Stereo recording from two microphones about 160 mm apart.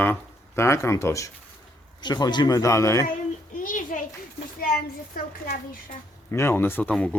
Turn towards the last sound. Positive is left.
turn(degrees=5)  # may be behind; listen again after turning